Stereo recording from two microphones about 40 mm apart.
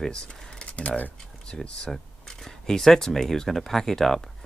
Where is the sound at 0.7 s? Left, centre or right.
Left.